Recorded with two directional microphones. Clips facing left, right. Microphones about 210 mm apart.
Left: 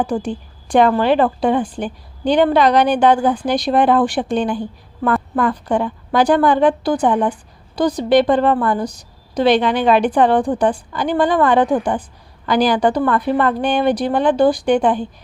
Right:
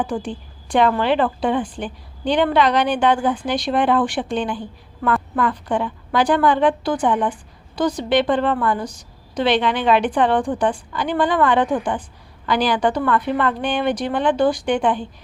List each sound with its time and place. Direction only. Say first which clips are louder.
0.0 s a woman's voice: left 4 dB; 40° left (ahead or behind)